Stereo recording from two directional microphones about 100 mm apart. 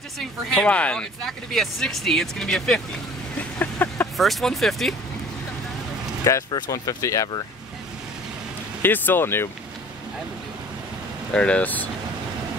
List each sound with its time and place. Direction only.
0.2 s speech: 5° left (ahead or behind)
3.3 s vehicle: 20° left (ahead or behind)
4.2 s speech: centre (ahead or behind)
6.3 s speech: 30° left (ahead or behind)
8.8 s speech: 20° left (ahead or behind)
11.3 s speech: 10° left (ahead or behind)